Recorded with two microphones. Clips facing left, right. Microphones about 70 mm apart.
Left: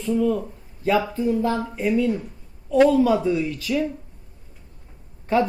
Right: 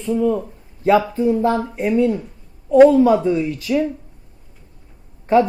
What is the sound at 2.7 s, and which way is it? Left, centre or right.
Speech, right.